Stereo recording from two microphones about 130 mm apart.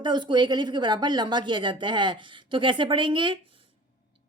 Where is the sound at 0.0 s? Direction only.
35° right (ahead or behind).